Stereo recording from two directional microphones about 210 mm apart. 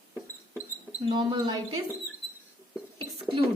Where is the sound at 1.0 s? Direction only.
20° right (ahead or behind).